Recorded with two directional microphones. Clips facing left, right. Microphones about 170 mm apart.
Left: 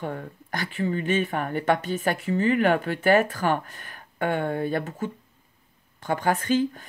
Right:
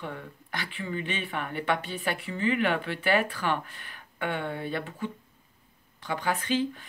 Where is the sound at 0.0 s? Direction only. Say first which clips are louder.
Left 6 dB; 45° left (ahead or behind).